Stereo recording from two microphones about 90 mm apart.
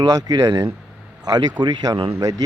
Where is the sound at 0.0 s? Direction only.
45° right (ahead or behind).